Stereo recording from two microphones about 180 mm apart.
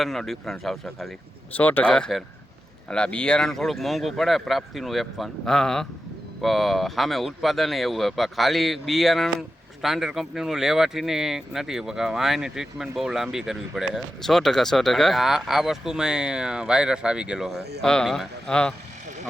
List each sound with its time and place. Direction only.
0.0 s speech: centre (ahead or behind)
17.5 s speech: 65° right (ahead or behind)
17.8 s speech: 5° left (ahead or behind)